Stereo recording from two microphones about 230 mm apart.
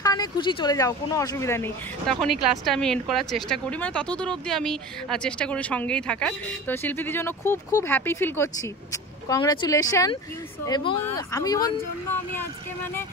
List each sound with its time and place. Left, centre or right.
0.0 s speech: centre
2.1 s speech: centre